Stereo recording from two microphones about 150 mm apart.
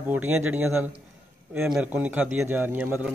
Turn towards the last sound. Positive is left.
turn(degrees=-5)  # may be behind; listen again after turning